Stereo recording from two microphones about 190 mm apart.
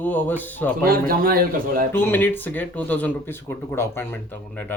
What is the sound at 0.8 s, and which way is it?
A man's voice, 50° right (ahead or behind).